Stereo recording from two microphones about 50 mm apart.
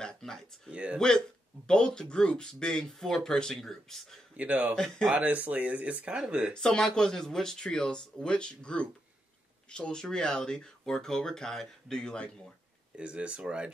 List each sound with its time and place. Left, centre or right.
0.0 s a sound: centre
0.7 s speech: right
0.9 s speech: centre
4.4 s speech: right
4.7 s speech: centre
5.1 s speech: right
6.5 s speech: centre
12.9 s speech: right